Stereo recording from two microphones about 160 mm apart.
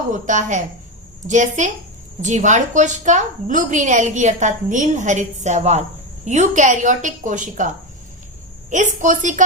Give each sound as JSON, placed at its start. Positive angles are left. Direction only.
{"t": 0.1, "sound": "a woman's voice", "side_deg": -50}
{"t": 8.7, "sound": "a woman's voice", "side_deg": -50}